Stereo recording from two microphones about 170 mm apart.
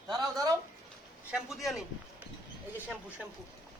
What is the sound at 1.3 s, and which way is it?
Speech, centre (ahead or behind).